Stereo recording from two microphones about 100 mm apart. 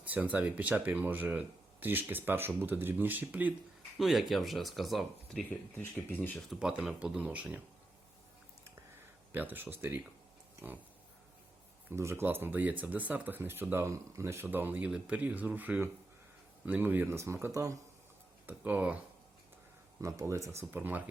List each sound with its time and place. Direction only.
0.0 s speech: 15° right (ahead or behind)
3.9 s speech: centre (ahead or behind)
5.5 s speech: 20° left (ahead or behind)
6.5 s speech: 10° right (ahead or behind)
9.3 s speech: 20° right (ahead or behind)
11.9 s speech: 25° right (ahead or behind)
18.4 s speech: 15° right (ahead or behind)
20.0 s speech: 30° right (ahead or behind)